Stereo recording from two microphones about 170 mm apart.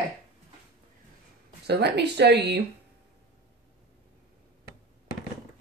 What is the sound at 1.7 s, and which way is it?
Speech, 75° right (ahead or behind).